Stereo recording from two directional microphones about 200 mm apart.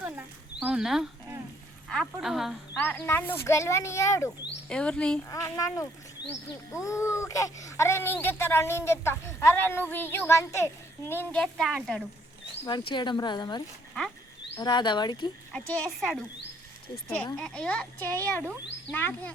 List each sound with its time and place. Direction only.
0.0 s a sound: 10° right (ahead or behind)
1.9 s speech: centre (ahead or behind)
2.8 s a child's voice: 10° left (ahead or behind)
5.3 s a child's voice: 15° left (ahead or behind); by 12.0 s centre (ahead or behind)
12.6 s speech: 20° left (ahead or behind)
14.6 s speech: 20° left (ahead or behind)
15.5 s speech: 5° left (ahead or behind)
17.3 s a child's voice: 5° left (ahead or behind)